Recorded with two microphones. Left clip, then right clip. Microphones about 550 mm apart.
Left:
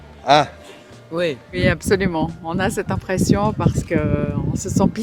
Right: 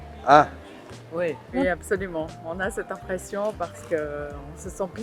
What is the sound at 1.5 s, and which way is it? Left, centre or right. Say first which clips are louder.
Speech: left 6 dB; left.